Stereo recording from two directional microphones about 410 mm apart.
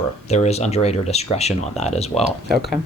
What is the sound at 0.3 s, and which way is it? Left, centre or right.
Speech, centre.